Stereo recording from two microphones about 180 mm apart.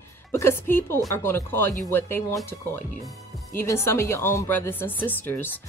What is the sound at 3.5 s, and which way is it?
A woman's voice, 15° left (ahead or behind).